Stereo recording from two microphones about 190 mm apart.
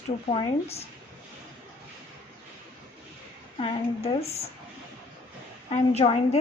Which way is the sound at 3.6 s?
30° left (ahead or behind).